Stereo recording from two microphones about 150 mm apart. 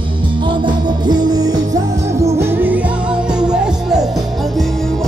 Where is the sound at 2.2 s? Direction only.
15° right (ahead or behind).